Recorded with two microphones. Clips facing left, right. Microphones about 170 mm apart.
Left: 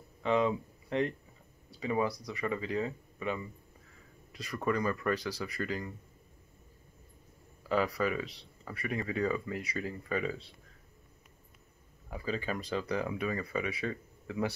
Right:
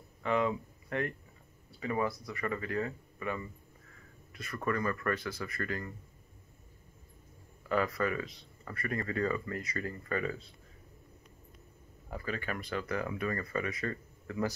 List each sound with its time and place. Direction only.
0.2 s speech: 20° left (ahead or behind)
4.5 s speech: 15° left (ahead or behind)
7.6 s speech: 15° left (ahead or behind)
12.3 s speech: 20° left (ahead or behind)